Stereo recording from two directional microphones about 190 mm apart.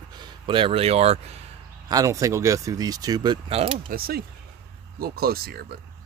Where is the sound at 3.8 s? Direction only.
50° right (ahead or behind).